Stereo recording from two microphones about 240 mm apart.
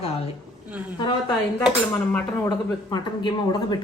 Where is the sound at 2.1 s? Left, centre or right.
Centre.